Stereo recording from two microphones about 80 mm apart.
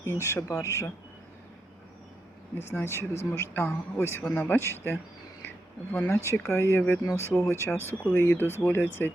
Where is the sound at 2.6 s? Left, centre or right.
Left.